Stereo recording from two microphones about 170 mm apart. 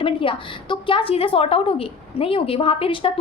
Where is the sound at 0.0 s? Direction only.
30° left (ahead or behind).